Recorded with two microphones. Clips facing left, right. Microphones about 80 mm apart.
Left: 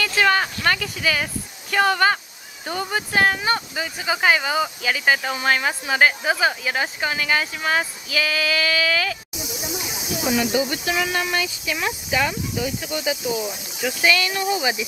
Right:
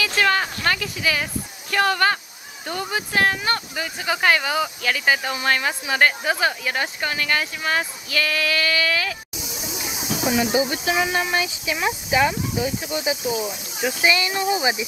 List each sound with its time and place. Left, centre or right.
0.2 s a sound: centre
0.7 s speech: centre
10.2 s speech: right